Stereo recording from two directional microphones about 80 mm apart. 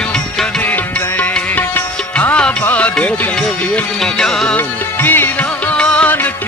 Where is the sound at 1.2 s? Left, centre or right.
Left.